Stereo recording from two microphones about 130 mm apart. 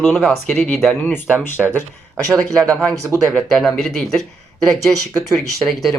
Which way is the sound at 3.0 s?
25° right (ahead or behind).